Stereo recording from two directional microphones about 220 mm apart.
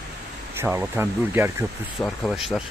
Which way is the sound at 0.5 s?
10° right (ahead or behind).